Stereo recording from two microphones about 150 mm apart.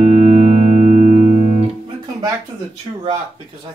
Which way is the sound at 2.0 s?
25° right (ahead or behind).